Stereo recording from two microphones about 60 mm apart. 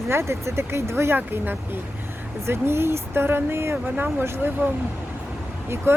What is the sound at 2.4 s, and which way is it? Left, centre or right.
Speech, right.